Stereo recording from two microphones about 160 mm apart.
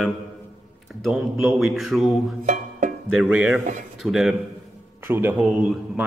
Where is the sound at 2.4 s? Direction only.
50° right (ahead or behind).